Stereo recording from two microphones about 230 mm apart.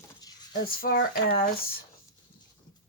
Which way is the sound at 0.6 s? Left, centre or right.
Left.